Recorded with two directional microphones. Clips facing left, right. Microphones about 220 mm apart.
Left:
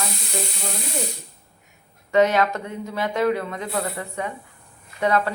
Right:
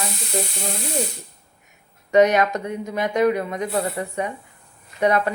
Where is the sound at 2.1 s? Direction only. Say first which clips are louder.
Right 2 dB; 20° right (ahead or behind).